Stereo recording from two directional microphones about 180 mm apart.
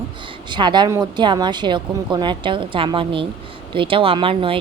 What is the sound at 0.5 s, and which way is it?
Speech, 25° right (ahead or behind).